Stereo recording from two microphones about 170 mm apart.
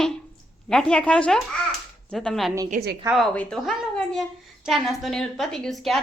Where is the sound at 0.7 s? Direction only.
5° left (ahead or behind).